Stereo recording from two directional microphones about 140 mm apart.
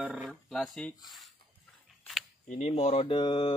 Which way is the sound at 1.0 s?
Centre (ahead or behind).